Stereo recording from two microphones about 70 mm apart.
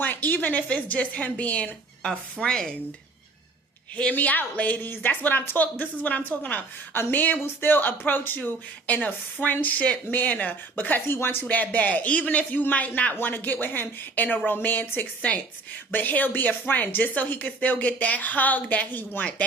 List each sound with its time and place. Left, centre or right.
0.0 s a woman's voice: left
3.9 s speech: centre